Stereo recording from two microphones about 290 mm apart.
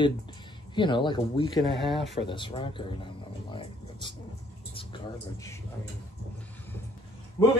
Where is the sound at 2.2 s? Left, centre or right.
Centre.